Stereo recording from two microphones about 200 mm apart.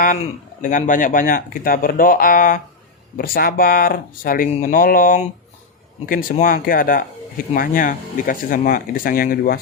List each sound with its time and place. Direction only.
0.6 s speech: 40° left (ahead or behind)
6.4 s speech: 45° left (ahead or behind)